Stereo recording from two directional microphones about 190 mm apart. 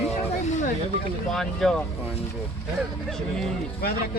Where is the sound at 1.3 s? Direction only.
5° left (ahead or behind).